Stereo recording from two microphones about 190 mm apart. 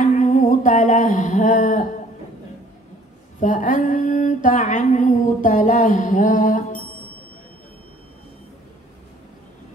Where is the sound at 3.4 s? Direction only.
40° left (ahead or behind).